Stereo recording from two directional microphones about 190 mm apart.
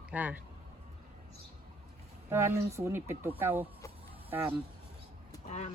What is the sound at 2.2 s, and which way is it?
Speech, 15° right (ahead or behind).